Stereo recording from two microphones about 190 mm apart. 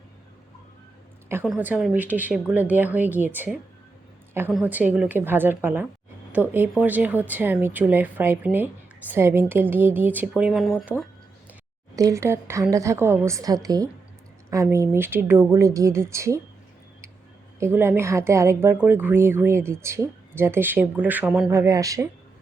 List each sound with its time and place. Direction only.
1.5 s a woman's voice: 10° right (ahead or behind)
11.9 s a woman's voice: 15° right (ahead or behind)
17.6 s a woman's voice: 10° right (ahead or behind)
21.5 s a woman's voice: 15° right (ahead or behind)